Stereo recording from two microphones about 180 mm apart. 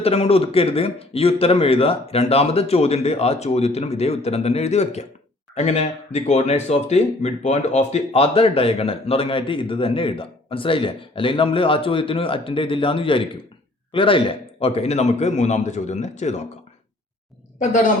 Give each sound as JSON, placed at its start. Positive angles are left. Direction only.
{"t": 0.0, "sound": "speech", "side_deg": 35}
{"t": 17.6, "sound": "a woman's voice", "side_deg": 45}